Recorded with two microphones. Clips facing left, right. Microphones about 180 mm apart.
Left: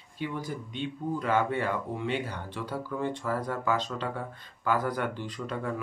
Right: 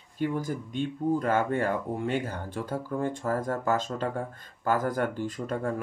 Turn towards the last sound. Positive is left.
turn(degrees=-45)  # may be behind; listen again after turning